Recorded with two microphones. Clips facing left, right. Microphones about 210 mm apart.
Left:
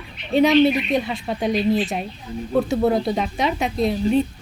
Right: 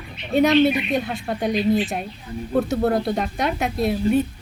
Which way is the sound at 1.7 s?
20° left (ahead or behind).